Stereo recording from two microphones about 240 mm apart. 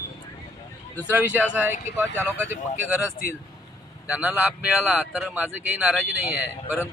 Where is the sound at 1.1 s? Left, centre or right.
Centre.